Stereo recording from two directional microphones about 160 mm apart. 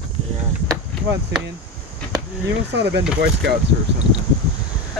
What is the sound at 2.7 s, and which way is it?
Speech, 90° right.